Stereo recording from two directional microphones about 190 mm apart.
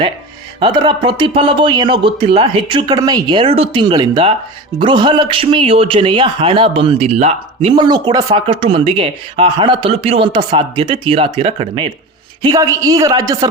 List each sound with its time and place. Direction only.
0.6 s a man's voice: 25° right (ahead or behind)